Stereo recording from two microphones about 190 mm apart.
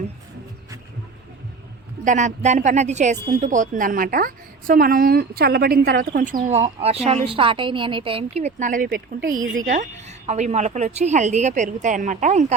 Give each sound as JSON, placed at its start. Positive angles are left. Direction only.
{"t": 2.0, "sound": "a woman's voice", "side_deg": -40}